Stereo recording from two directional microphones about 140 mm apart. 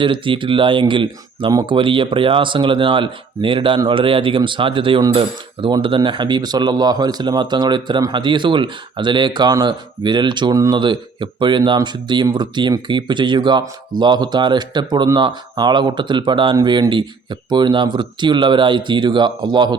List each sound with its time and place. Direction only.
0.0 s speech: 35° right (ahead or behind)